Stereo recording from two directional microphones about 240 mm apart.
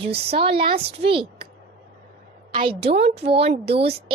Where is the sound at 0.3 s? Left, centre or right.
Right.